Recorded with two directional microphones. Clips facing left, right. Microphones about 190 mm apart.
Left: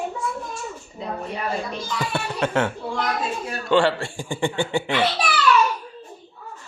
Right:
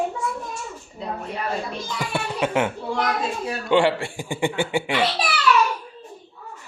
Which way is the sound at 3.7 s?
15° right (ahead or behind).